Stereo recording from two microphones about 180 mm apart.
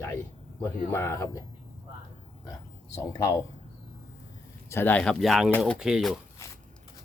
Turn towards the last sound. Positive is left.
turn(degrees=0)  # may be behind; listen again after turning